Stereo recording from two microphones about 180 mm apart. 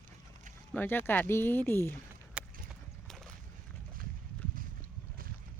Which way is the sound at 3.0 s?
Centre (ahead or behind).